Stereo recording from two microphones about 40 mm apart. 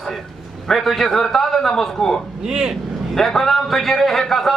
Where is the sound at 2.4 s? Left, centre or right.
Centre.